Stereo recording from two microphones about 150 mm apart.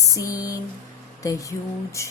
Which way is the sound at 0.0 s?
20° left (ahead or behind).